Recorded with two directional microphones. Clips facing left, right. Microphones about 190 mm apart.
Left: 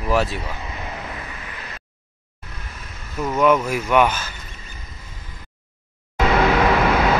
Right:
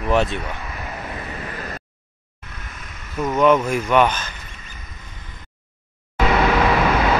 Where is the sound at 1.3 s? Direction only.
45° right (ahead or behind).